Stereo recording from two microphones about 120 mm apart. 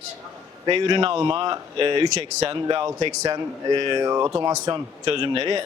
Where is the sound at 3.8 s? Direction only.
40° right (ahead or behind).